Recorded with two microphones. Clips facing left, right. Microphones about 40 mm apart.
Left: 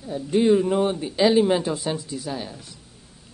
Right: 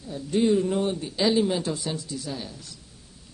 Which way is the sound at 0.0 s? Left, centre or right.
Centre.